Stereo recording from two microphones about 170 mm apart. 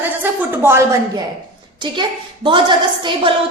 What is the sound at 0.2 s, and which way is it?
A woman's voice, 10° right (ahead or behind).